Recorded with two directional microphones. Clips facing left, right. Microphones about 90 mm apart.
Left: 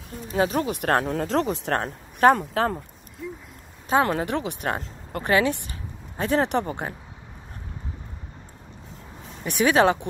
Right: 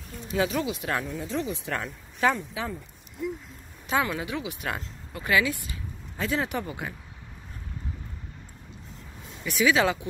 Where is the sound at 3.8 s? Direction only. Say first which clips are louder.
Left 5 dB; 40° left (ahead or behind).